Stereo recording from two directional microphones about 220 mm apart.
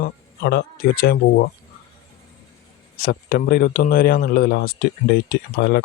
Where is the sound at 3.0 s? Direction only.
45° left (ahead or behind).